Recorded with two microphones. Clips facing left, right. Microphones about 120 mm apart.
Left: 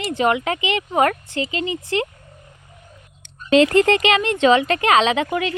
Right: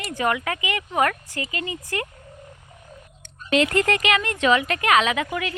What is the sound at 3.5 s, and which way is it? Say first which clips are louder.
Speech: left 6 dB; 30° left (ahead or behind).